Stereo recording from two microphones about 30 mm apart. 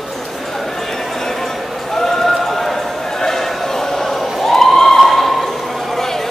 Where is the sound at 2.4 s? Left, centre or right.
Centre.